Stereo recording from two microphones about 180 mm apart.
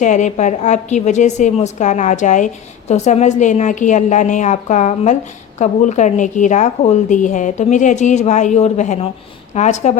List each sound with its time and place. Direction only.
0.0 s a woman's voice: 45° left (ahead or behind)